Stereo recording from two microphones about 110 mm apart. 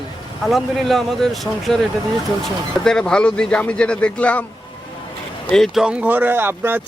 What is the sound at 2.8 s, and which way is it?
Speech, 5° left (ahead or behind).